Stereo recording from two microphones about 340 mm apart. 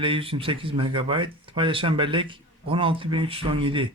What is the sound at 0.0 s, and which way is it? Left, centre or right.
Speech, centre.